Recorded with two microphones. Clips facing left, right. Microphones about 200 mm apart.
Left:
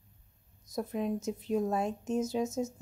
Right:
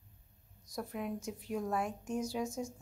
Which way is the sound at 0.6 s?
20° left (ahead or behind).